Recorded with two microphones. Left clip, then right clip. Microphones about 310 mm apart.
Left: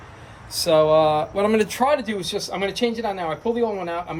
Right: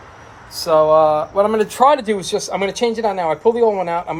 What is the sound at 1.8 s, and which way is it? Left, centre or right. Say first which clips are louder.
Speech: right 7 dB; right.